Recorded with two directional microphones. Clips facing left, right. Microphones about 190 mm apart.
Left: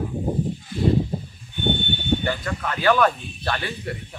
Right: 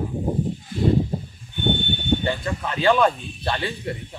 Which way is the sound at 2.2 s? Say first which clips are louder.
Right 1 dB; 25° right (ahead or behind).